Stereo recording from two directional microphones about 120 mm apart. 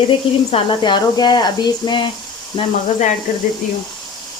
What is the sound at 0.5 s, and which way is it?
Speech, 40° left (ahead or behind).